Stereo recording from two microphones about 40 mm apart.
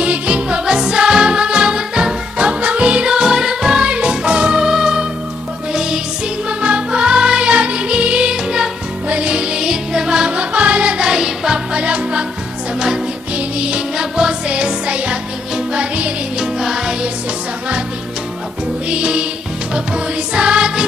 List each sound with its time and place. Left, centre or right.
0.0 s music: right
0.7 s music: centre
6.6 s music: right
10.3 s music: right
11.1 s music: centre
11.7 s music: right
13.6 s music: right
14.5 s music: right
16.3 s music: centre
18.9 s music: right